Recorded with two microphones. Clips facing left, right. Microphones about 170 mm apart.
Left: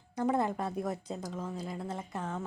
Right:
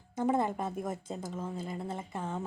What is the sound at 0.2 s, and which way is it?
A woman's voice, 5° right (ahead or behind).